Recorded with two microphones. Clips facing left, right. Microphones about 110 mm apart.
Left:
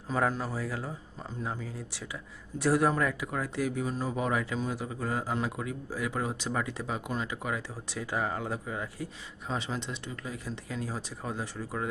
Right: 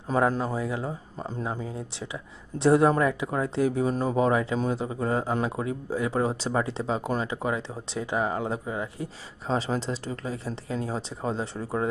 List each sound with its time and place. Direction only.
0.3 s speech: 20° right (ahead or behind)
9.5 s speech: 35° right (ahead or behind)